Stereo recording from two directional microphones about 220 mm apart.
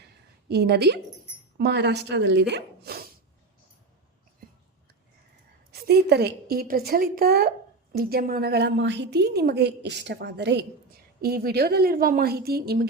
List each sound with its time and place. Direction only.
0.0 s a sound: 50° right (ahead or behind)
1.5 s a woman's voice: 50° right (ahead or behind)
5.8 s a woman's voice: 45° right (ahead or behind)